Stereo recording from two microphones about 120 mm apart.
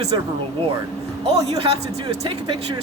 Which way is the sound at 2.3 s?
45° right (ahead or behind).